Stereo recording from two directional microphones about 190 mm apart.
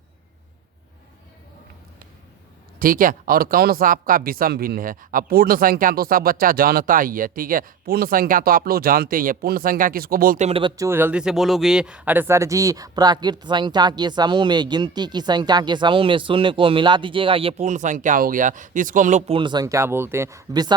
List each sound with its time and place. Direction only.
2.7 s speech: 50° right (ahead or behind)
10.8 s speech: 10° right (ahead or behind); by 19.2 s 40° right (ahead or behind)
19.3 s speech: 25° right (ahead or behind)